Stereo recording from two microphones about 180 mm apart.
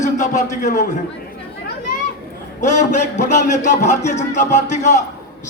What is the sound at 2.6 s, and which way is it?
A man's voice, 40° left (ahead or behind).